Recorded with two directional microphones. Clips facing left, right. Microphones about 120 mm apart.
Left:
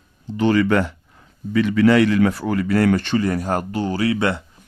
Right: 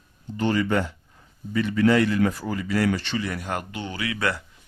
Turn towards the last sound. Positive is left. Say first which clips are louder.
# left 10 dB
turn(degrees=35)  # may be behind; listen again after turning